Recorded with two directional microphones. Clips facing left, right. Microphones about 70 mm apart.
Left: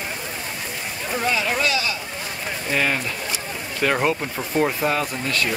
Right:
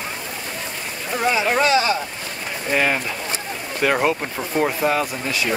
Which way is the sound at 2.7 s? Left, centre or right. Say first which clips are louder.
Right 3 dB; centre.